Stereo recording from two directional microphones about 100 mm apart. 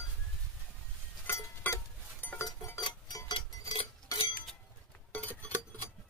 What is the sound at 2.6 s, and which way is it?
Dishes, 30° left (ahead or behind).